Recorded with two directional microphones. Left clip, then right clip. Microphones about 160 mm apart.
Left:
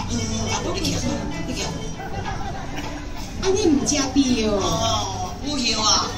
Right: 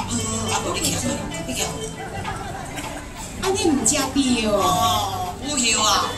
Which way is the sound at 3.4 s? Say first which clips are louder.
Left 1 dB; 20° right (ahead or behind).